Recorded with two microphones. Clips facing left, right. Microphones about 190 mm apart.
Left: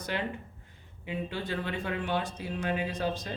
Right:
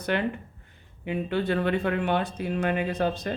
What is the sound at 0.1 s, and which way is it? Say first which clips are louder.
Speech: right 6 dB; 65° right (ahead or behind).